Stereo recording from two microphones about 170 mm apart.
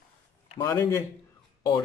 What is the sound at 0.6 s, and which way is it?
Speech, 20° left (ahead or behind).